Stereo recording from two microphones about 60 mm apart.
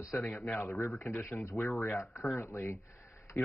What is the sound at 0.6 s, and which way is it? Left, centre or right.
Speech, left.